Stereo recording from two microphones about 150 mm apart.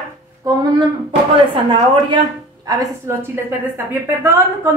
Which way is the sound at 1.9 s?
30° right (ahead or behind).